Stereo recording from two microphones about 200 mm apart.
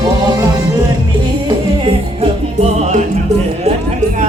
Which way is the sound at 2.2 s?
30° right (ahead or behind).